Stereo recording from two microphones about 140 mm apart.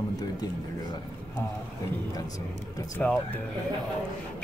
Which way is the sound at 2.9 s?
10° left (ahead or behind).